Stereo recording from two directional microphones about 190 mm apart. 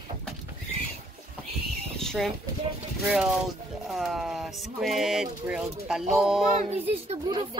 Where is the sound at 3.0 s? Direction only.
5° right (ahead or behind).